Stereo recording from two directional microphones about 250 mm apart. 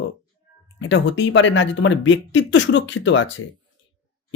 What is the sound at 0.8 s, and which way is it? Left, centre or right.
Speech, left.